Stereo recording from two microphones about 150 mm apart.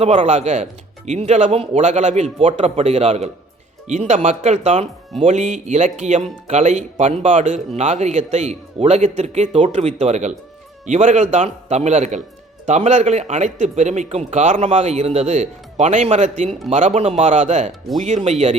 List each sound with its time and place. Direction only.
0.0 s speech: 50° right (ahead or behind)